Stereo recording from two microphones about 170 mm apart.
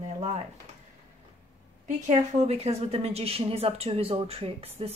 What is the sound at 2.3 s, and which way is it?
Speech, 40° right (ahead or behind).